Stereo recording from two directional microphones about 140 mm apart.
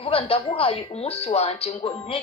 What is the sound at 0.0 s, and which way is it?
Speech, 40° left (ahead or behind).